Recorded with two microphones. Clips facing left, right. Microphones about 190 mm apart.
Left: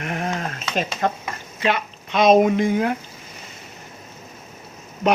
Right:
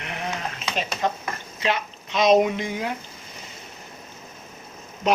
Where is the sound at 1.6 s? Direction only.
55° left (ahead or behind).